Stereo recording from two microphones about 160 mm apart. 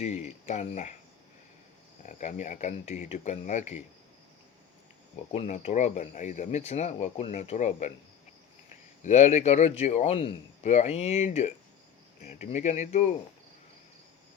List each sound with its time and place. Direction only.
0.0 s speech: 45° left (ahead or behind)
2.0 s speech: 50° left (ahead or behind)
5.3 s speech: 40° left (ahead or behind)
9.0 s speech: 45° left (ahead or behind)